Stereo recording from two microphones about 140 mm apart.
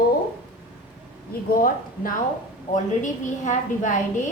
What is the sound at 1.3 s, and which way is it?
Speech, 90° left.